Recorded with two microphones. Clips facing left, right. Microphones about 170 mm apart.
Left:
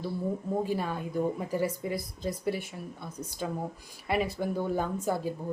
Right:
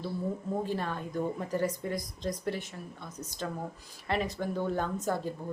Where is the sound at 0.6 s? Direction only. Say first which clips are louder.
Left 2 dB; 10° left (ahead or behind).